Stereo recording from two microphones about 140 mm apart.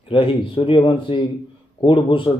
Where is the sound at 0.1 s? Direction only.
40° left (ahead or behind).